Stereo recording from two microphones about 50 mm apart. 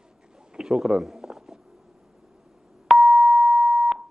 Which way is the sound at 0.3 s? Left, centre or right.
Centre.